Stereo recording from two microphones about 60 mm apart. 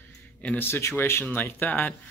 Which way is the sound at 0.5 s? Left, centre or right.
Left.